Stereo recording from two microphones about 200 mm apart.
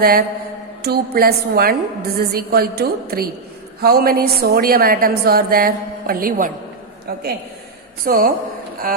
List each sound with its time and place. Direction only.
0.0 s a woman's voice: 50° right (ahead or behind)
8.0 s a woman's voice: 45° right (ahead or behind)